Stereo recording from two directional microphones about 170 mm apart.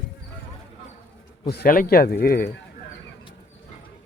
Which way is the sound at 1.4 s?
65° left (ahead or behind).